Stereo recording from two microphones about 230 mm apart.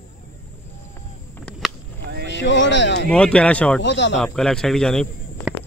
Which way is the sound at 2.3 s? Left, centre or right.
Left.